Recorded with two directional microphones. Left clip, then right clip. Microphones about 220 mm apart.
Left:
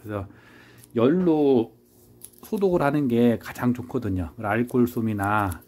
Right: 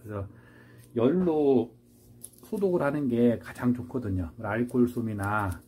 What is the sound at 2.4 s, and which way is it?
Speech, 40° left (ahead or behind).